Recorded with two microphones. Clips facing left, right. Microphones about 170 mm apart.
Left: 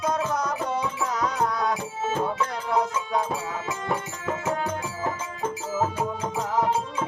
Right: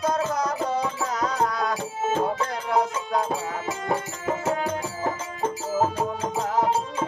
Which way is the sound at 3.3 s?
30° right (ahead or behind).